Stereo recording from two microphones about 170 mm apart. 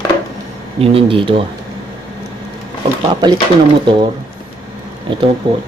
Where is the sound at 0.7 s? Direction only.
30° right (ahead or behind).